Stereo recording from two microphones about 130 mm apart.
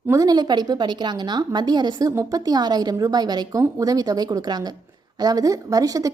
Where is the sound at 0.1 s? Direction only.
30° right (ahead or behind).